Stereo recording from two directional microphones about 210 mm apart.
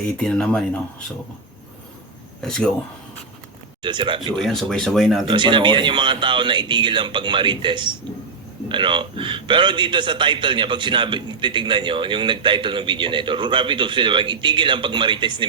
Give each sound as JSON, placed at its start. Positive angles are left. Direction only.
{"t": 0.2, "sound": "speech", "side_deg": 5}
{"t": 2.4, "sound": "speech", "side_deg": 0}
{"t": 3.8, "sound": "a man's voice", "side_deg": -20}
{"t": 4.4, "sound": "speech", "side_deg": 0}
{"t": 5.3, "sound": "a man's voice", "side_deg": -25}